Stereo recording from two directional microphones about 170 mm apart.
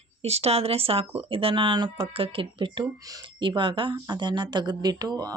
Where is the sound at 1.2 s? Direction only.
35° right (ahead or behind).